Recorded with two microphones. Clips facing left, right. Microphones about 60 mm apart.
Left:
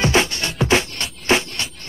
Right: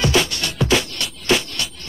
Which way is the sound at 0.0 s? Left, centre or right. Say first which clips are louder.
Left 1 dB; left.